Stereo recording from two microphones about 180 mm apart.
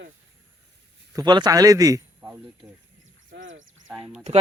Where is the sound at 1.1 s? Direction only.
20° right (ahead or behind).